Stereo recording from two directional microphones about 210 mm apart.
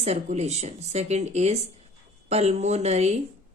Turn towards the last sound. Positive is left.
turn(degrees=-30)  # may be behind; listen again after turning